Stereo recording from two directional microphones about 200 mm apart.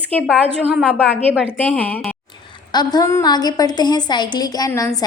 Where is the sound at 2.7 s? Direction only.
20° left (ahead or behind).